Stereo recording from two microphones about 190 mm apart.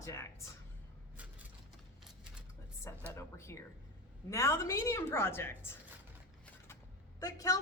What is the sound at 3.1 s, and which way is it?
A woman's voice, 15° left (ahead or behind).